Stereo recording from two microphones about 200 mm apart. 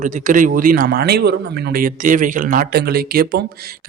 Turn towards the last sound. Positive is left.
turn(degrees=-50)  # may be behind; listen again after turning